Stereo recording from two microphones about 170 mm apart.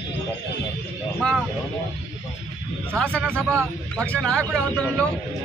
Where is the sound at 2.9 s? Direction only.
5° left (ahead or behind).